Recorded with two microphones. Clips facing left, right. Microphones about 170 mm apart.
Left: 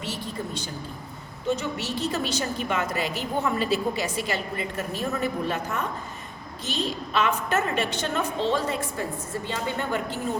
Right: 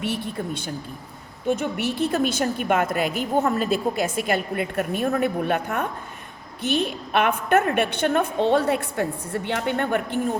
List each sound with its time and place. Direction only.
0.0 s a woman's voice: 55° right (ahead or behind)